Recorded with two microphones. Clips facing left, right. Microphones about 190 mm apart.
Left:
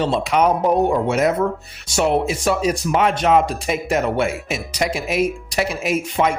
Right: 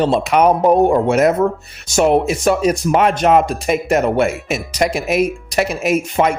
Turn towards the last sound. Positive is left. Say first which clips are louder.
# right 4 dB
turn(degrees=-45)  # may be behind; listen again after turning